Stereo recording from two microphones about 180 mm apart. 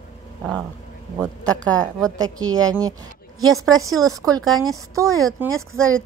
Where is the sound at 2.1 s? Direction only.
20° right (ahead or behind).